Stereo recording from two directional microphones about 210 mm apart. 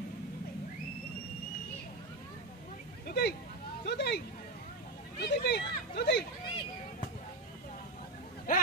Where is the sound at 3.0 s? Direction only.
50° left (ahead or behind).